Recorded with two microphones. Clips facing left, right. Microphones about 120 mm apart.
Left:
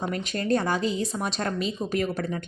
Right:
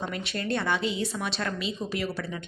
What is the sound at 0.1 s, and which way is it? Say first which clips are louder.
A woman's voice: left 5 dB; 40° left (ahead or behind).